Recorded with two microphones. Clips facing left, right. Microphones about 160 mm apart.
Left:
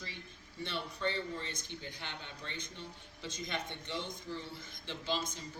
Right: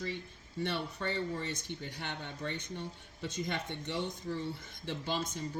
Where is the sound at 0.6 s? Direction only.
60° right (ahead or behind).